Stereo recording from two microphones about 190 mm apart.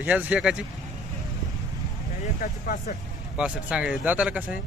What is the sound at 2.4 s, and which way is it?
Speech, 40° left (ahead or behind).